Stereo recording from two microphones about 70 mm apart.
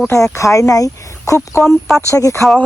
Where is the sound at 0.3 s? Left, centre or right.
Left.